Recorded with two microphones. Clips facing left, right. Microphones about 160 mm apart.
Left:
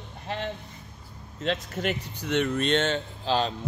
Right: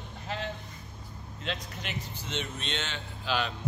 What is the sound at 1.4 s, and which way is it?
Speech, 45° left (ahead or behind).